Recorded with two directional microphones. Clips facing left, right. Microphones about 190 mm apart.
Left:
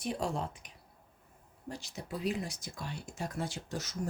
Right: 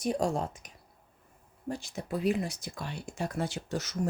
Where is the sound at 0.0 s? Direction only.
45° right (ahead or behind).